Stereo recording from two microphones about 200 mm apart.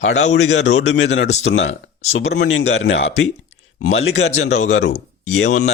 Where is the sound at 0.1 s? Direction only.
35° left (ahead or behind).